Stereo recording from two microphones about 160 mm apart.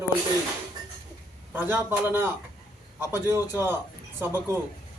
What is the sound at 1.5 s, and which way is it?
A man's voice, 15° right (ahead or behind).